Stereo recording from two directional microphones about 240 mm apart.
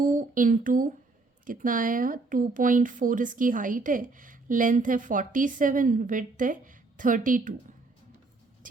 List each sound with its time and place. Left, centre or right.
0.0 s speech: right